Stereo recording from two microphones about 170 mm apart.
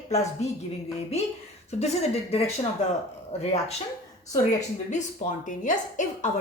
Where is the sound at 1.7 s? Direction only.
40° left (ahead or behind).